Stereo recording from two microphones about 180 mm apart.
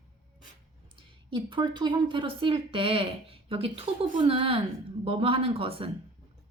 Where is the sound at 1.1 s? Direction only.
25° right (ahead or behind).